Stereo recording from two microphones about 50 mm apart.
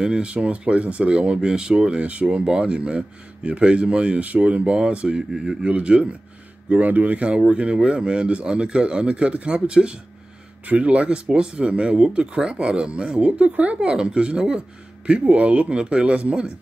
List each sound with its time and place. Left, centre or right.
0.0 s speech: centre
5.3 s speech: centre
5.6 s speech: right
7.2 s speech: right